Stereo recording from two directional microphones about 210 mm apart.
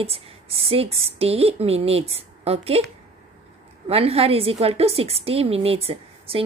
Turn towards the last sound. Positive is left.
turn(degrees=-25)  # may be behind; listen again after turning